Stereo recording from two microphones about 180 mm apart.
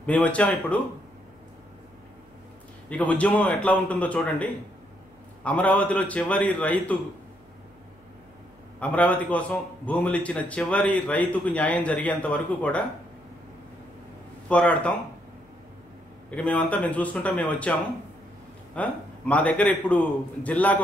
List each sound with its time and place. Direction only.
0.0 s a man's voice: 5° left (ahead or behind)
2.9 s a man's voice: 5° left (ahead or behind)
8.7 s a man's voice: 10° left (ahead or behind)
14.5 s a man's voice: 5° left (ahead or behind)
16.3 s a man's voice: 10° left (ahead or behind)
18.8 s a man's voice: 10° left (ahead or behind)